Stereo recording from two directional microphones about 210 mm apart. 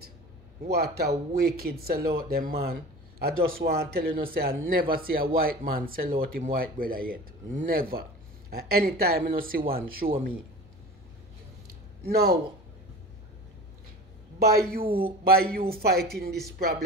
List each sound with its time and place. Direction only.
0.7 s speech: 50° right (ahead or behind)
12.0 s speech: 50° right (ahead or behind)
14.4 s speech: 45° right (ahead or behind)